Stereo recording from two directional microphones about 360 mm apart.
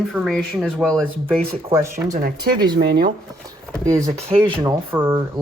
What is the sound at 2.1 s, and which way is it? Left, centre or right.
Speech, right.